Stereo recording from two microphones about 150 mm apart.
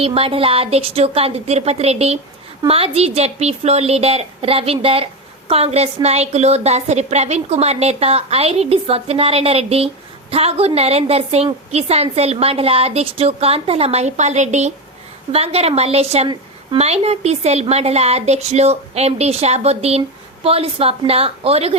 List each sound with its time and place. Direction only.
0.0 s a woman's voice: 40° right (ahead or behind)